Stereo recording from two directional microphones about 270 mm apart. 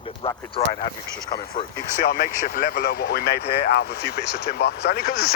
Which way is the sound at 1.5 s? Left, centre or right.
Left.